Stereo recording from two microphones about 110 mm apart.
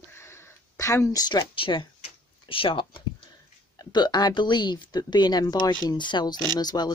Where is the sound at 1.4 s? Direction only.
55° left (ahead or behind).